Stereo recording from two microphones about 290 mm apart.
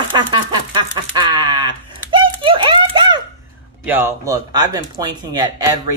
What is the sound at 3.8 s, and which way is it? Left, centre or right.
A man's voice, centre.